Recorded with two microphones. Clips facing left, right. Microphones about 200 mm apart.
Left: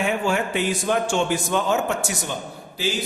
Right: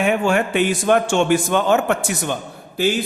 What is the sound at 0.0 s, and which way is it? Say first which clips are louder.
A man's voice: right 5 dB; 60° right (ahead or behind).